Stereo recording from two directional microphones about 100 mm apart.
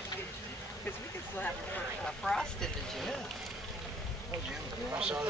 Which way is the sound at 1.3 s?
15° left (ahead or behind).